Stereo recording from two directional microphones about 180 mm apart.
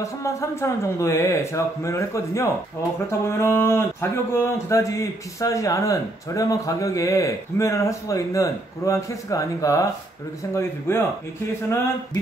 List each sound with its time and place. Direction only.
0.0 s speech: 15° left (ahead or behind)